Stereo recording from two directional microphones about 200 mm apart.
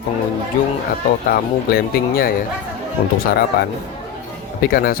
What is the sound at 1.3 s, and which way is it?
Speech, 45° left (ahead or behind).